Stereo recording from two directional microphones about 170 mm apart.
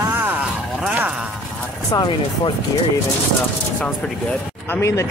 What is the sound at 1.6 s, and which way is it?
Speech, 20° left (ahead or behind).